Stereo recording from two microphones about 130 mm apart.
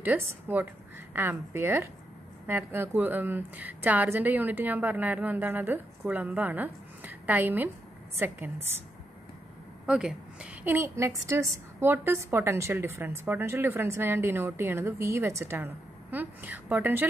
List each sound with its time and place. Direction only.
0.0 s a woman's voice: 15° right (ahead or behind)
9.8 s a woman's voice: 10° right (ahead or behind)